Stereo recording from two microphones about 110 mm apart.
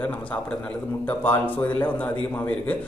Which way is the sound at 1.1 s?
15° left (ahead or behind).